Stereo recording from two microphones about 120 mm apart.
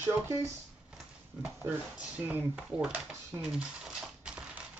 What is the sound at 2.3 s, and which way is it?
Speech, 15° right (ahead or behind).